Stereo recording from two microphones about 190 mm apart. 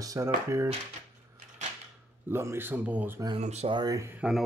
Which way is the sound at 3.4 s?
35° right (ahead or behind).